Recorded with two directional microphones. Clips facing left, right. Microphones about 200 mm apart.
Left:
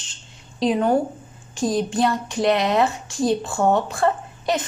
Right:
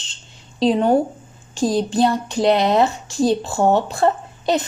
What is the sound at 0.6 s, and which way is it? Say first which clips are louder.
A woman's voice: right 3 dB; 30° right (ahead or behind).